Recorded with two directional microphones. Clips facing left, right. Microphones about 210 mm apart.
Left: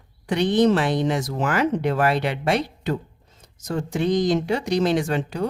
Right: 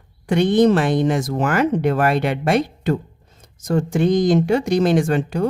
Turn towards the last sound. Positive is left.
turn(degrees=-50)  # may be behind; listen again after turning